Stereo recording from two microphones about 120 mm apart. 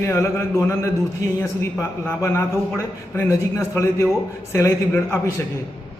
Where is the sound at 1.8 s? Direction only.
20° left (ahead or behind).